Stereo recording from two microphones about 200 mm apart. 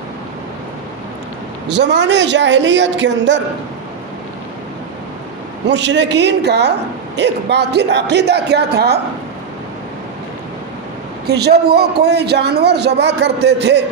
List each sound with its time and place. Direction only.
1.7 s a man's voice: 60° right (ahead or behind)
5.7 s a man's voice: 60° right (ahead or behind)
11.2 s a man's voice: 55° right (ahead or behind)